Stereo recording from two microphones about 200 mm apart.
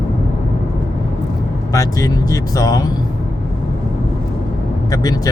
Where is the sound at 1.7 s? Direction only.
15° left (ahead or behind).